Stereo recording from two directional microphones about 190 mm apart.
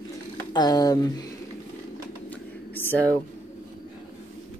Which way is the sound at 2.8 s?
10° left (ahead or behind).